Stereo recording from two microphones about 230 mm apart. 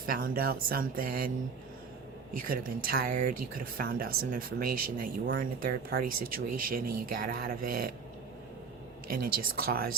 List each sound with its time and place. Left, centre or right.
0.0 s speech: right
2.3 s speech: right
9.0 s speech: right